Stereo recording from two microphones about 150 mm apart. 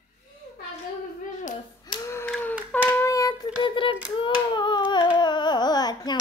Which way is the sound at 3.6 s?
35° left (ahead or behind).